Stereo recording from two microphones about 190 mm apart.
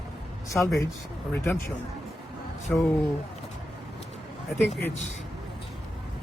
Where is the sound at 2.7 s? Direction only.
5° left (ahead or behind).